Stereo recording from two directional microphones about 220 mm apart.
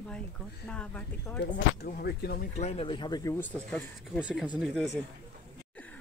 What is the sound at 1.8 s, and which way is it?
Speech, 45° left (ahead or behind).